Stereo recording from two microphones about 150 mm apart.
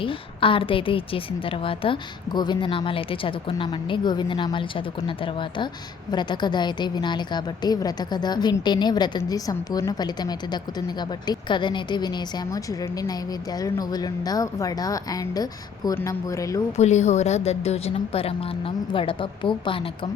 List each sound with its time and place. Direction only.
0.0 s a woman's voice: 35° left (ahead or behind)
16.7 s a woman's voice: 50° left (ahead or behind)